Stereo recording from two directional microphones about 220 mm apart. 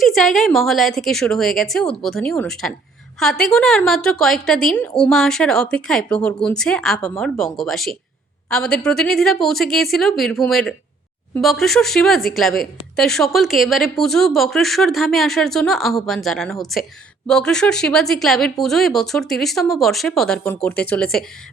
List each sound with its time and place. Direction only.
0.0 s a woman's voice: centre (ahead or behind)